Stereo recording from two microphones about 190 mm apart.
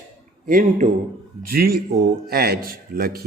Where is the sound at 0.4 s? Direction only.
45° right (ahead or behind).